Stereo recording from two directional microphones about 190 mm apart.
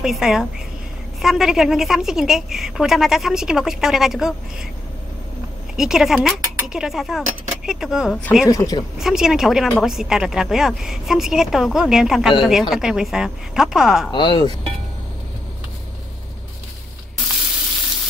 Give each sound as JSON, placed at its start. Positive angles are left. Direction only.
{"t": 0.0, "sound": "a woman's voice", "side_deg": 0}
{"t": 5.8, "sound": "a woman's voice", "side_deg": 0}
{"t": 8.5, "sound": "speech", "side_deg": 20}
{"t": 8.9, "sound": "a woman's voice", "side_deg": -5}
{"t": 14.1, "sound": "speech", "side_deg": 25}